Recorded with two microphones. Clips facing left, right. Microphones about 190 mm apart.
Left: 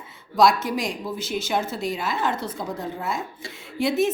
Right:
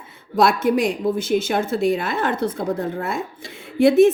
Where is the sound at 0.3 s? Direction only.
55° right (ahead or behind).